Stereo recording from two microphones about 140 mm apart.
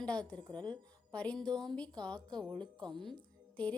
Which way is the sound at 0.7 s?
10° left (ahead or behind).